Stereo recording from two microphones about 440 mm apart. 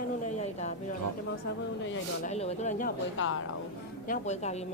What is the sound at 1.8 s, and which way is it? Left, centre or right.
A woman's voice, left.